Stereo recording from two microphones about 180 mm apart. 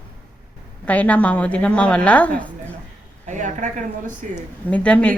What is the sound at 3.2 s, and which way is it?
Speech, 45° right (ahead or behind).